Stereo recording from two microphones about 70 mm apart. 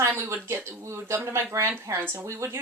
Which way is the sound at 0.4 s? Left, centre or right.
Right.